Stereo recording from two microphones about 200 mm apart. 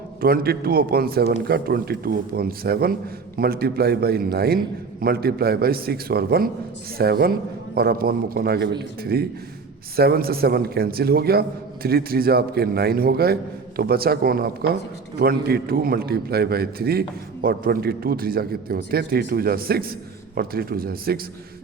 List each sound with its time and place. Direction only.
0.2 s a man's voice: 45° right (ahead or behind)